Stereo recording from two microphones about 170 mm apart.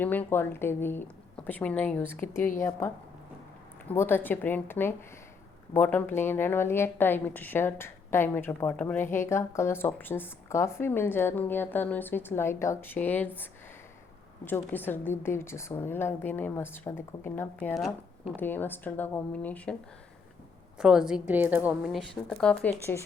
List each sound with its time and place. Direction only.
0.0 s a woman's voice: 10° left (ahead or behind)
17.7 s speech: centre (ahead or behind)
18.3 s a woman's voice: 10° left (ahead or behind)
20.7 s a woman's voice: 5° right (ahead or behind); by 23.0 s 10° left (ahead or behind)